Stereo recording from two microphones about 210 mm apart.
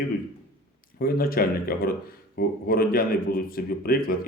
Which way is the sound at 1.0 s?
45° left (ahead or behind).